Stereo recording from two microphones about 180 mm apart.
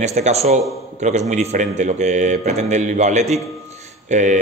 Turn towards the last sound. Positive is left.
turn(degrees=-40)  # may be behind; listen again after turning